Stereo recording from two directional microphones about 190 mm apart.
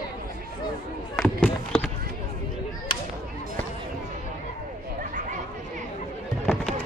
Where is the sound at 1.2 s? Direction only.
5° left (ahead or behind).